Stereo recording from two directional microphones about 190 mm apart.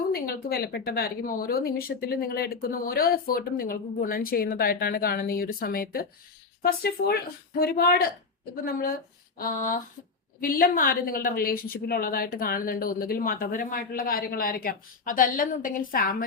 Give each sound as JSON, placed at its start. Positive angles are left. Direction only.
{"t": 0.1, "sound": "speech", "side_deg": 55}